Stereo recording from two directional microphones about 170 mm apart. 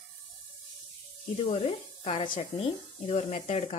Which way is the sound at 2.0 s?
30° left (ahead or behind).